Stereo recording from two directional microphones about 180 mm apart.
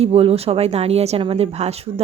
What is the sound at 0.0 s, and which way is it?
Speech, 35° right (ahead or behind).